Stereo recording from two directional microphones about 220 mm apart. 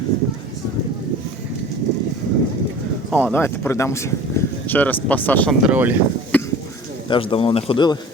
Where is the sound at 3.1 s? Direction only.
10° left (ahead or behind).